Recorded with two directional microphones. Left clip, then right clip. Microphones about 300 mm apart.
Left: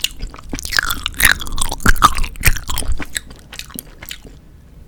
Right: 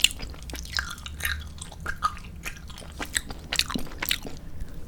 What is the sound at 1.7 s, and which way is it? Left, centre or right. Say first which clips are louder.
Chewing: left 16 dB; left.